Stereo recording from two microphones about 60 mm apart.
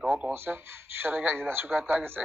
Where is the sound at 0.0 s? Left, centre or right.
Right.